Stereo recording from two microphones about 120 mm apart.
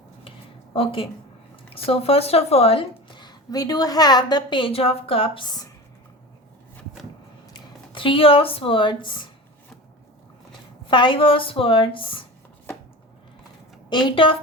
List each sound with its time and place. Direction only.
0.3 s a sound: 50° left (ahead or behind)
1.7 s speech: 55° left (ahead or behind)
7.5 s speech: 45° left (ahead or behind)
10.8 s speech: 45° left (ahead or behind)
13.9 s speech: 45° left (ahead or behind)